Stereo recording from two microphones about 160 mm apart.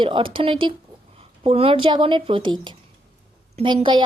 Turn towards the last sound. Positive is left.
turn(degrees=-30)  # may be behind; listen again after turning